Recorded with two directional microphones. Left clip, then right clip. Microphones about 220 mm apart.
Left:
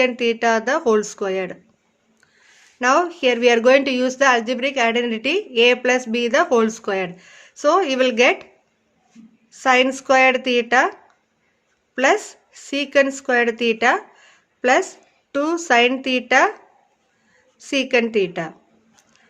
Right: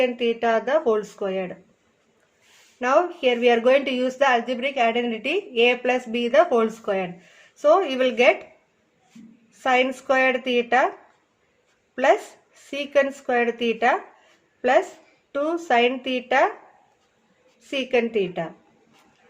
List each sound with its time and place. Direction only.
0.0 s a woman's voice: 50° left (ahead or behind)
2.7 s a woman's voice: 50° left (ahead or behind)
9.5 s a woman's voice: 50° left (ahead or behind)
12.7 s a woman's voice: 50° left (ahead or behind)
17.6 s a woman's voice: 50° left (ahead or behind)